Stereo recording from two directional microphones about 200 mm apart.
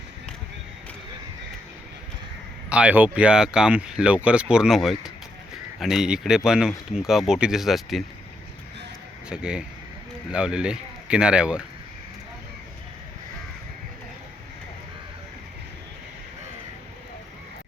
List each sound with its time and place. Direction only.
2.6 s speech: 5° right (ahead or behind)
9.3 s speech: 5° right (ahead or behind)